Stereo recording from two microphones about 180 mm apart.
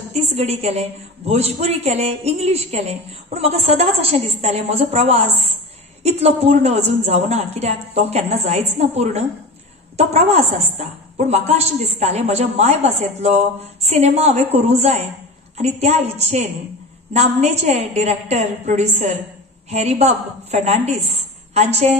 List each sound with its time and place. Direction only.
0.1 s a woman's voice: 35° right (ahead or behind)